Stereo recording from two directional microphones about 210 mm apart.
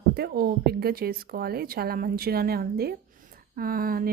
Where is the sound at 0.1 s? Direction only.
50° right (ahead or behind).